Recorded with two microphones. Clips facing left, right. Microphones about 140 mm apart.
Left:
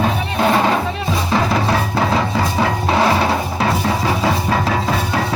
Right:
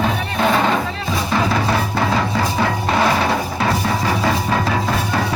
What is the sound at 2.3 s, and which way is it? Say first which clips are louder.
Music: left 1 dB; 5° left (ahead or behind).